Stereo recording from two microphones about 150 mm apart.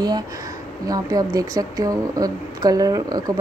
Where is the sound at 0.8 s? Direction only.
25° right (ahead or behind).